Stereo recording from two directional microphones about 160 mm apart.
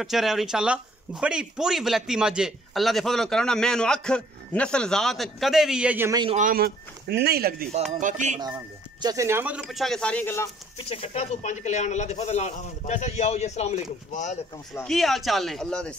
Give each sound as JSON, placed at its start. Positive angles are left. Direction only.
{"t": 0.0, "sound": "speech", "side_deg": 0}
{"t": 6.3, "sound": "speech", "side_deg": -60}
{"t": 8.0, "sound": "speech", "side_deg": -50}
{"t": 9.0, "sound": "speech", "side_deg": -20}
{"t": 10.8, "sound": "speech", "side_deg": 35}
{"t": 14.9, "sound": "speech", "side_deg": 0}